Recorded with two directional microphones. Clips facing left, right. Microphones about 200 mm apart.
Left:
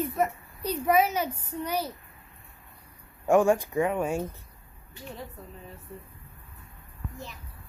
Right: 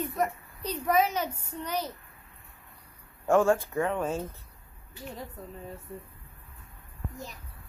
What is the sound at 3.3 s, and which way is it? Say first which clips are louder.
Speech: left 2 dB; 15° left (ahead or behind).